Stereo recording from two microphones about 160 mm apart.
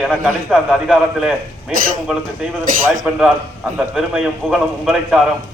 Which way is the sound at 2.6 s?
55° right (ahead or behind).